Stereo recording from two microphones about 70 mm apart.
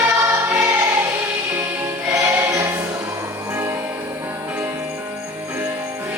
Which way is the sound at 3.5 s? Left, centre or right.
Right.